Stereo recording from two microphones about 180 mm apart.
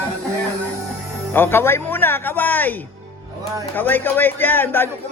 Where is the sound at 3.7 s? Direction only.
10° left (ahead or behind).